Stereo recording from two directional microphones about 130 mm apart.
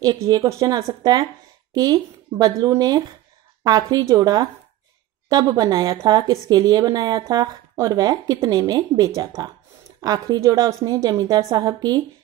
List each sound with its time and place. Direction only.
0.0 s a woman's voice: 30° right (ahead or behind)